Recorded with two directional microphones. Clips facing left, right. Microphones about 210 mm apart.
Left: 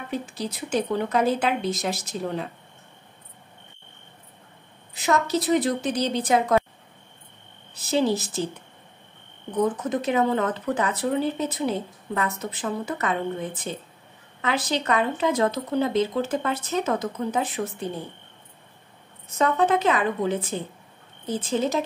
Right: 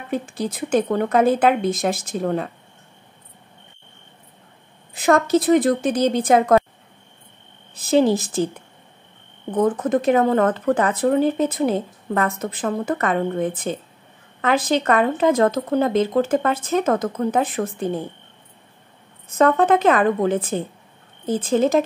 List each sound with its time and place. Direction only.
0.1 s speech: 50° right (ahead or behind)
4.9 s speech: 50° right (ahead or behind)
7.9 s speech: 50° right (ahead or behind)
9.5 s speech: 50° right (ahead or behind)
19.3 s speech: 50° right (ahead or behind)